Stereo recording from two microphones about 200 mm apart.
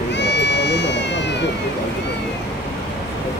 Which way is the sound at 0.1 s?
60° left (ahead or behind).